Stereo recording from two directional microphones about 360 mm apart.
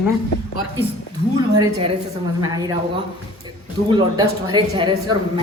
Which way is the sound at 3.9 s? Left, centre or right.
Centre.